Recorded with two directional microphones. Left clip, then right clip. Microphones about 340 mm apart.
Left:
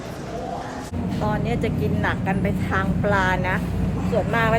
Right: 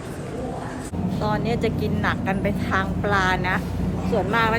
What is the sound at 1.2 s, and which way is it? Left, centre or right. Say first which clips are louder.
Speech: right 1 dB; centre.